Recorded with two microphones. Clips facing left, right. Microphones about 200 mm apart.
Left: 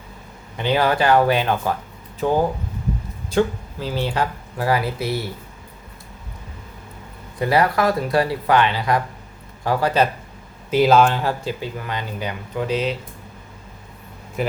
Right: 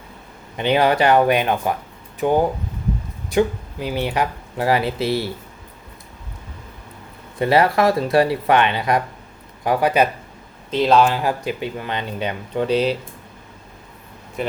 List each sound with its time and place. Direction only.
0.5 s speech: 20° right (ahead or behind)
7.3 s speech: 25° right (ahead or behind)
10.7 s speech: 5° left (ahead or behind)
11.2 s speech: 15° right (ahead or behind); by 12.9 s 30° right (ahead or behind)
14.4 s speech: centre (ahead or behind)